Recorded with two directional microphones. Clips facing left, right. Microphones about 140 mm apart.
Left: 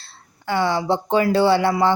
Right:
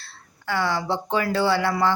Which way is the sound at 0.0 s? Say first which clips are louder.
Left 3 dB; 20° left (ahead or behind).